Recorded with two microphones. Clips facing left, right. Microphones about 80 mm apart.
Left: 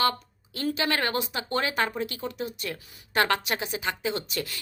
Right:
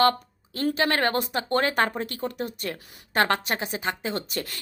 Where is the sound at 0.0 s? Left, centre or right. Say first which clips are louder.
Right 5 dB; right.